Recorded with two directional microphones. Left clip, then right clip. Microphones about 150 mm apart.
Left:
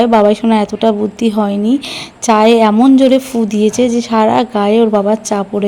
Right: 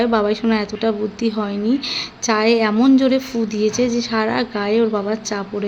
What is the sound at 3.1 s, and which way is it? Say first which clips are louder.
Speech: left 7 dB; 40° left (ahead or behind).